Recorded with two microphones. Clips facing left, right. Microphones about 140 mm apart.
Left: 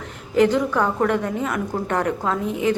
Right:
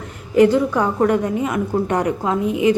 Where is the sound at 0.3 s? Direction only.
10° right (ahead or behind).